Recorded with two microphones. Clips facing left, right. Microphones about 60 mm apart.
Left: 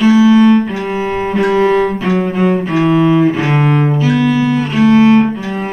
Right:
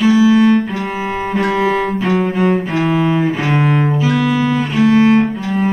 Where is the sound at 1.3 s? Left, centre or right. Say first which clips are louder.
Left 4 dB; centre.